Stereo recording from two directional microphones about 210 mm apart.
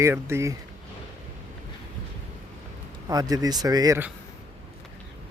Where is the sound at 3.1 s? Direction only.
15° right (ahead or behind).